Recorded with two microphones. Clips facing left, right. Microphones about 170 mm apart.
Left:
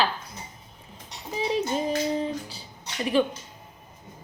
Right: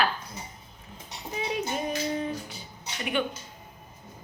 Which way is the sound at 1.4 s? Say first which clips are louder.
Left 4 dB; 30° left (ahead or behind).